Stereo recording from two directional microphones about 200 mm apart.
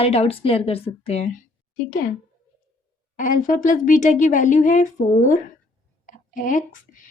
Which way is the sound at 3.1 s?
40° left (ahead or behind).